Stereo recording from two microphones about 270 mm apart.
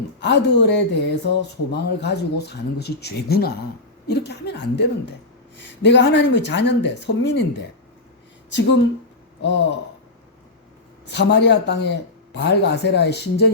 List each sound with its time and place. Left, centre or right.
0.2 s speech: left
8.4 s a man's voice: left
11.1 s speech: left